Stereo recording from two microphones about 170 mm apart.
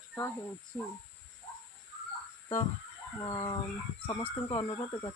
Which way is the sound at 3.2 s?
35° left (ahead or behind).